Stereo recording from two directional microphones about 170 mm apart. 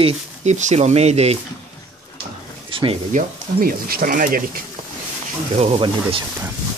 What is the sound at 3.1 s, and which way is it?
Speech, 60° right (ahead or behind).